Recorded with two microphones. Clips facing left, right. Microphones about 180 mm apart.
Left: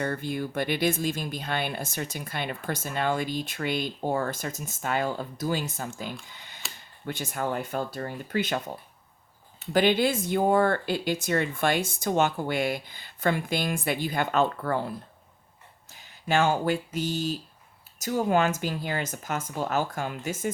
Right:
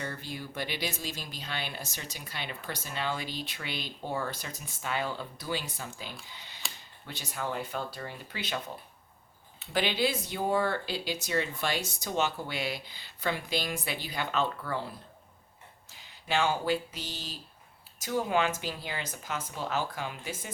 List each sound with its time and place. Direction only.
0.0 s speech: 55° left (ahead or behind)
6.3 s a sound: 50° left (ahead or behind)
7.0 s speech: 50° left (ahead or behind)
16.0 s speech: 45° left (ahead or behind)